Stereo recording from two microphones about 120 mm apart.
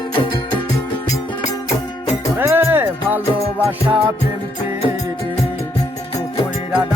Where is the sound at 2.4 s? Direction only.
20° right (ahead or behind).